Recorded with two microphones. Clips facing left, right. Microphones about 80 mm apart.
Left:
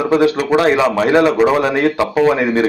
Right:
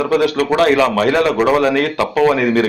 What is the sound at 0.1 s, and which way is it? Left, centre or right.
A man's voice, left.